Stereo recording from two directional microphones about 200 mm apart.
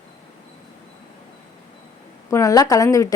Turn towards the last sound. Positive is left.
turn(degrees=15)  # may be behind; listen again after turning